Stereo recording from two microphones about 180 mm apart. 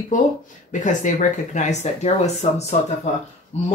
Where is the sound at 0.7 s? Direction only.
45° left (ahead or behind).